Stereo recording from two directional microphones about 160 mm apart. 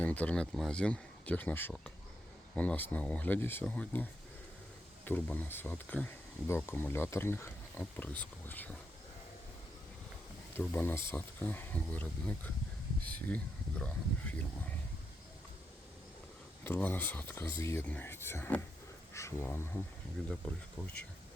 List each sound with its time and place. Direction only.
0.0 s speech: 10° left (ahead or behind)
10.6 s speech: 10° left (ahead or behind)
16.6 s speech: 10° left (ahead or behind)
20.8 s speech: 5° left (ahead or behind)